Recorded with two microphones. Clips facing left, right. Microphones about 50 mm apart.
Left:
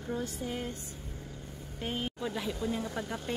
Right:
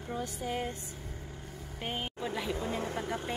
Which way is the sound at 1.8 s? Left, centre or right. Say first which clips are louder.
Left 1 dB; right.